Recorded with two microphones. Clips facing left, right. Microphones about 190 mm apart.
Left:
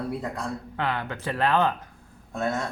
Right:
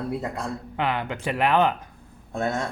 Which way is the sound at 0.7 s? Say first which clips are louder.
Right 3 dB; 15° right (ahead or behind).